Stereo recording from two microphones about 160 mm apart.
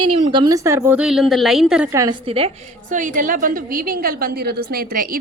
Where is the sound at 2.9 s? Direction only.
55° right (ahead or behind).